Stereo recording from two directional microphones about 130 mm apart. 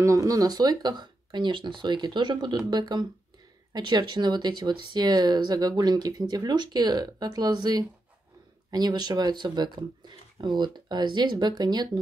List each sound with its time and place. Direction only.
0.0 s speech: 25° right (ahead or behind)